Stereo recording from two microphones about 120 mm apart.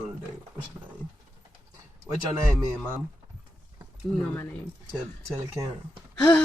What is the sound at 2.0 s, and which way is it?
Speech, 25° right (ahead or behind).